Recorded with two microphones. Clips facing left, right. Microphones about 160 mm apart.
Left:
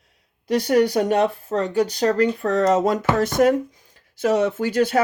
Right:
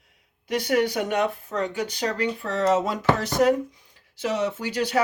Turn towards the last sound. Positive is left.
turn(degrees=45)  # may be behind; listen again after turning